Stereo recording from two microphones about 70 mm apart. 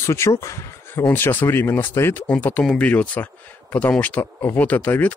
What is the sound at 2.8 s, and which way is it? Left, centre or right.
Speech, left.